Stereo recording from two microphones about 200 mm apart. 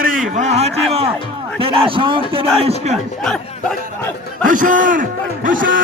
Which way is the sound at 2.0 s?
25° right (ahead or behind).